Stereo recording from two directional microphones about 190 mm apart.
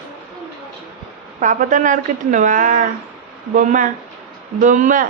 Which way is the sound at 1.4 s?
40° right (ahead or behind).